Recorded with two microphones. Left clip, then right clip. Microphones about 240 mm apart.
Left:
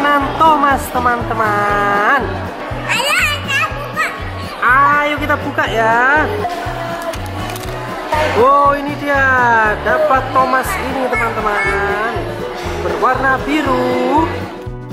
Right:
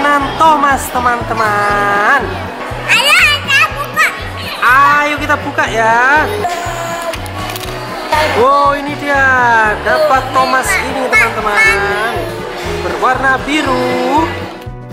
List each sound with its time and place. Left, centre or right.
0.0 s music: centre
5.6 s speech: centre
8.1 s speech: centre
13.7 s speech: centre